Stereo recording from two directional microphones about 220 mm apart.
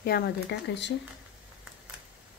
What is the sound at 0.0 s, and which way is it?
Speech, 45° left (ahead or behind).